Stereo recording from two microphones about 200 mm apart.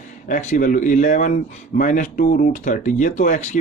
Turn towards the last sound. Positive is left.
turn(degrees=40)  # may be behind; listen again after turning